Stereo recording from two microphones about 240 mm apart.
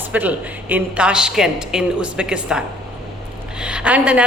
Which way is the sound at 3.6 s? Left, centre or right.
Centre.